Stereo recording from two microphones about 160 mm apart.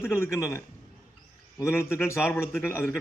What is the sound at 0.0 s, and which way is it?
A man's voice, 20° left (ahead or behind).